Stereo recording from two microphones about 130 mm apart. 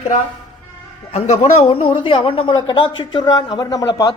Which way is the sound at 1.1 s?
55° left (ahead or behind).